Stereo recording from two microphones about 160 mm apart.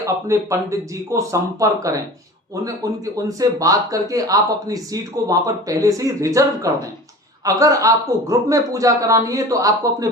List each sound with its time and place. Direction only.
0.0 s speech: 20° right (ahead or behind)